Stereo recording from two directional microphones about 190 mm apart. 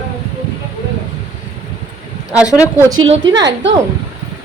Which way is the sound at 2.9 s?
85° right.